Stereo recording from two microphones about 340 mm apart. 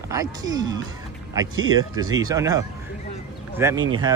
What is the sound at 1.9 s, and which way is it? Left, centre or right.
Speech, centre.